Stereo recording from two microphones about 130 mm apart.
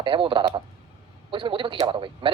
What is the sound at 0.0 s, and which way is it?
A man's voice, 40° right (ahead or behind).